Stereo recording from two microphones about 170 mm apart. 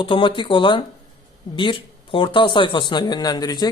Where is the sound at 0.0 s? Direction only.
30° left (ahead or behind).